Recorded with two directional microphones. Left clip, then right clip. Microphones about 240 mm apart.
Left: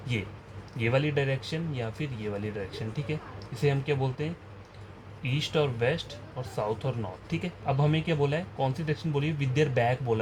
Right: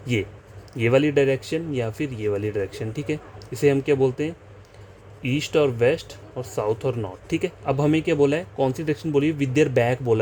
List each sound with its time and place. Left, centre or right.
0.8 s speech: right